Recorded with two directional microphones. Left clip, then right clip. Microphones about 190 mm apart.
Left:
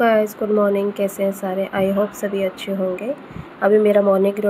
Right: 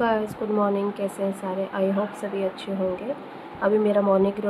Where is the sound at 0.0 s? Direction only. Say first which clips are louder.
Left 7 dB; 20° left (ahead or behind).